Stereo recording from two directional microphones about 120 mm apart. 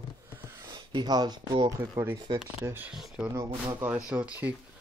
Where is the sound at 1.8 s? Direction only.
15° right (ahead or behind).